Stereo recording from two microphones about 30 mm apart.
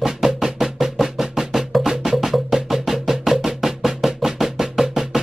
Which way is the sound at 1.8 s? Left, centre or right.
Centre.